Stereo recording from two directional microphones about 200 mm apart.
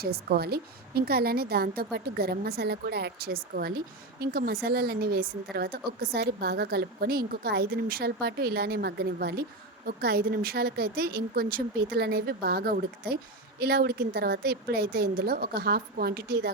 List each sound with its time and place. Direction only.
0.0 s a woman's voice: 50° right (ahead or behind)